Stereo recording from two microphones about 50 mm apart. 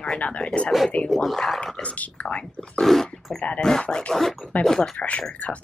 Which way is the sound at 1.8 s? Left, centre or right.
Left.